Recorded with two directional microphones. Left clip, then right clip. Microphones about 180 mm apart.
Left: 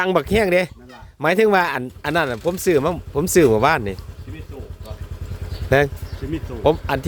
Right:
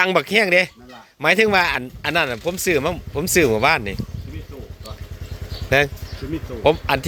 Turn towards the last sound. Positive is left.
turn(degrees=20)  # may be behind; listen again after turning